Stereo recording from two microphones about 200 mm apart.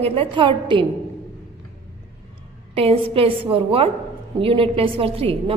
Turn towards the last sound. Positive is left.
turn(degrees=-30)  # may be behind; listen again after turning